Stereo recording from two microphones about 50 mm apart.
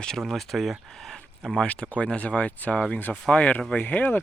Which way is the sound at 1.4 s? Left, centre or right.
Centre.